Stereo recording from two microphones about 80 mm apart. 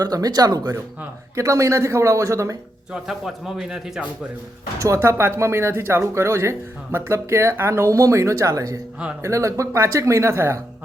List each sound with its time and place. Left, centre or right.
0.0 s speech: right
1.4 s speech: right
2.9 s a man's voice: centre
4.8 s speech: right